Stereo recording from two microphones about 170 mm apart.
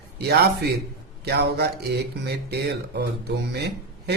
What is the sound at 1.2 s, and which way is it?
Mantra, 70° right (ahead or behind).